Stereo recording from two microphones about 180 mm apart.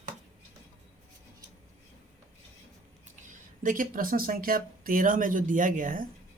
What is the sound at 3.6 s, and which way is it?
Speech, 50° right (ahead or behind).